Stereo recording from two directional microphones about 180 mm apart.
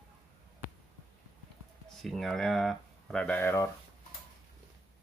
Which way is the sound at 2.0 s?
Centre (ahead or behind).